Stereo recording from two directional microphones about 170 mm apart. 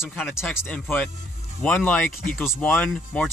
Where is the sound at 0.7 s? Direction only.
10° left (ahead or behind).